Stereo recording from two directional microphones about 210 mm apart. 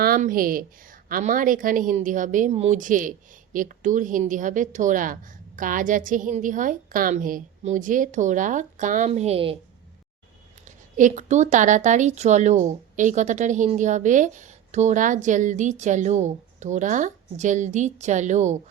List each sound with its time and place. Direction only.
0.0 s a woman's voice: 45° right (ahead or behind); by 9.6 s 30° right (ahead or behind)
10.7 s a woman's voice: 35° right (ahead or behind)